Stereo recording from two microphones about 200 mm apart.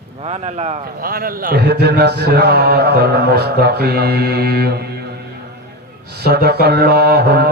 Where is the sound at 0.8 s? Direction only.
45° right (ahead or behind).